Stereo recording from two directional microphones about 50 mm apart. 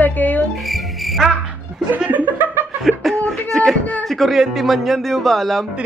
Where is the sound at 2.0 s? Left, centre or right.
Right.